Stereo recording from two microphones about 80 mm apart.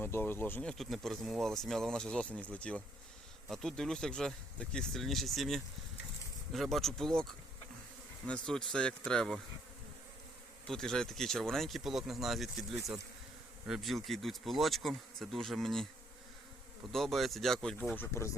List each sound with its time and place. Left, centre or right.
0.0 s speech: left
0.6 s speech: centre
10.7 s speech: centre
16.9 s speech: centre
17.9 s speech: left